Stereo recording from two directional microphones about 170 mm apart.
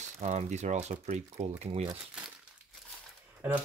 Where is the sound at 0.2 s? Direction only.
40° right (ahead or behind).